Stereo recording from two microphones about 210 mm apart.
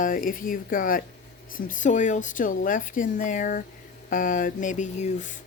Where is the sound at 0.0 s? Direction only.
40° left (ahead or behind).